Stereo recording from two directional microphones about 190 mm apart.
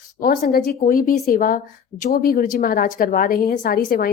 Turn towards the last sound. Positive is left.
turn(degrees=50)  # may be behind; listen again after turning